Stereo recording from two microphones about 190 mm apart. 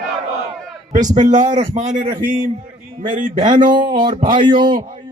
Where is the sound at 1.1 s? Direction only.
40° right (ahead or behind).